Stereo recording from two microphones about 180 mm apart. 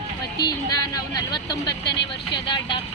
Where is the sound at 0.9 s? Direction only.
20° left (ahead or behind).